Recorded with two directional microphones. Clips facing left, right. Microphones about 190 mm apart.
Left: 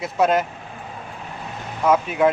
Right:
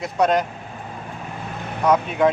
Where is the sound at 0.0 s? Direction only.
5° left (ahead or behind).